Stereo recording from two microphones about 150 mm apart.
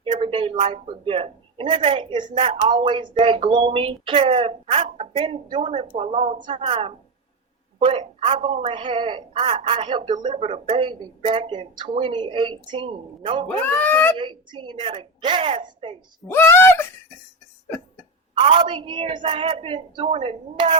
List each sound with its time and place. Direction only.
0.0 s a sound: 35° right (ahead or behind)
0.7 s a woman's voice: 35° right (ahead or behind)
13.5 s speech: 10° left (ahead or behind)
14.2 s speech: 35° right (ahead or behind)
16.3 s speech: 15° left (ahead or behind)
18.3 s speech: 35° right (ahead or behind)